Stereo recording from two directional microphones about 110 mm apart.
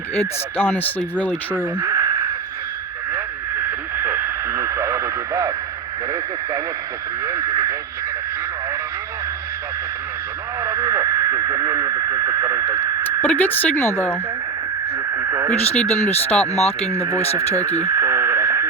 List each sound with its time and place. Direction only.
0.1 s speech: 20° left (ahead or behind)
1.8 s a sound: 30° right (ahead or behind)
3.9 s radio: 20° right (ahead or behind)
7.3 s speech: 30° right (ahead or behind)
10.6 s a sound: 30° right (ahead or behind)
13.2 s speech: 15° left (ahead or behind)
15.1 s radio: 25° right (ahead or behind)
15.7 s speech: 10° left (ahead or behind)
16.5 s speech: 75° left (ahead or behind)
17.3 s speech: 25° right (ahead or behind)
17.7 s radio: 25° right (ahead or behind)